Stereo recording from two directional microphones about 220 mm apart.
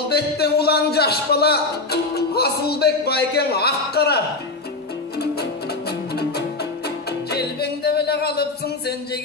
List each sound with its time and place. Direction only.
0.1 s speech: 45° left (ahead or behind)
5.2 s music: 45° left (ahead or behind)